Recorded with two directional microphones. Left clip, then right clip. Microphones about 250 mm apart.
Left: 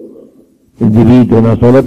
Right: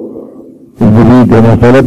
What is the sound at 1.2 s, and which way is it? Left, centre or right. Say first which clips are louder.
Speech: right 3 dB; left.